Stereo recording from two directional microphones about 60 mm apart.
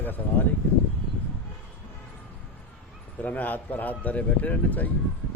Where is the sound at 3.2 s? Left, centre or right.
Left.